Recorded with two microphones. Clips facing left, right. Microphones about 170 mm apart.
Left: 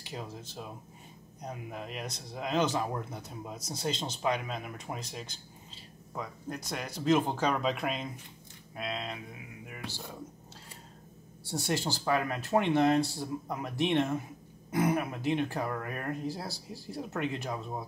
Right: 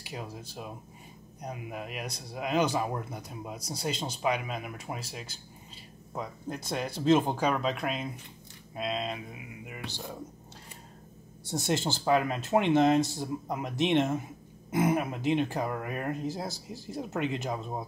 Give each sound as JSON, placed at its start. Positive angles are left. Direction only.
{"t": 0.0, "sound": "speech", "side_deg": -10}
{"t": 6.1, "sound": "speech", "side_deg": -25}
{"t": 7.3, "sound": "speech", "side_deg": -5}
{"t": 8.7, "sound": "speech", "side_deg": -20}
{"t": 11.4, "sound": "speech", "side_deg": -20}